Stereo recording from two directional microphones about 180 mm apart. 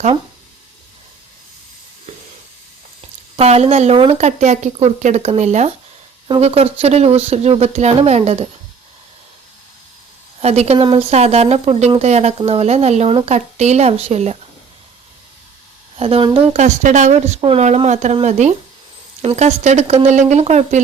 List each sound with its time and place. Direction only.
3.3 s speech: 35° right (ahead or behind)
6.2 s speech: 30° right (ahead or behind)
10.4 s speech: 35° right (ahead or behind)
16.0 s speech: 35° right (ahead or behind)